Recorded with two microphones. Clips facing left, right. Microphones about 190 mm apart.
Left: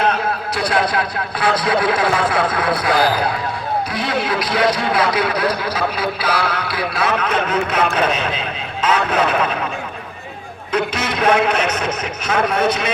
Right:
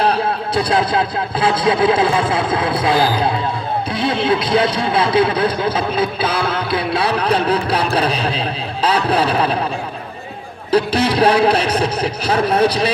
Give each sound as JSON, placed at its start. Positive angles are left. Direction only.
{"t": 0.0, "sound": "speech", "side_deg": -30}
{"t": 10.7, "sound": "a man's voice", "side_deg": -35}